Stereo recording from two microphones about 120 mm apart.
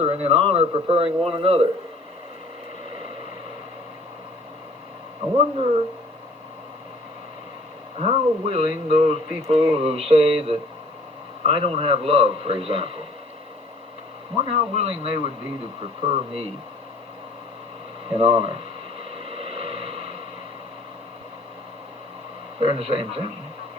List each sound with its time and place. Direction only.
0.0 s a man's voice: 60° right (ahead or behind)
7.9 s a man's voice: 60° right (ahead or behind)
14.3 s a man's voice: 55° right (ahead or behind)
18.1 s a man's voice: 50° right (ahead or behind)
18.9 s a sound: 55° right (ahead or behind)
22.6 s a man's voice: 50° right (ahead or behind)